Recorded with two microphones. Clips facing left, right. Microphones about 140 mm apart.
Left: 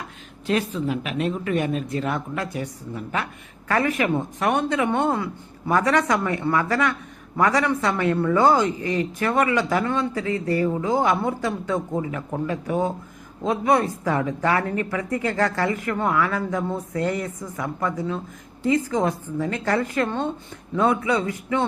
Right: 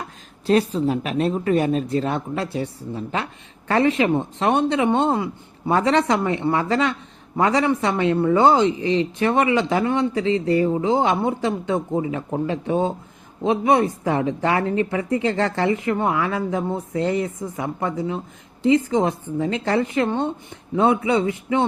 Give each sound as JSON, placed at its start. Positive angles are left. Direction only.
{"t": 0.4, "sound": "speech", "side_deg": -35}